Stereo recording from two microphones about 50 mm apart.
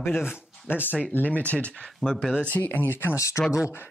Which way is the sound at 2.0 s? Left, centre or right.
Centre.